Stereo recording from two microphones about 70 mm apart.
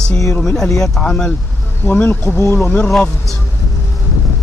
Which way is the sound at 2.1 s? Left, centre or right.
Left.